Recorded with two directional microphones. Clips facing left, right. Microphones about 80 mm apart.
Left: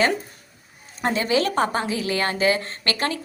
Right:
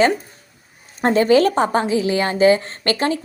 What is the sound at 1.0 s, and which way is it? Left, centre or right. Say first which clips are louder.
Speech: right 8 dB; right.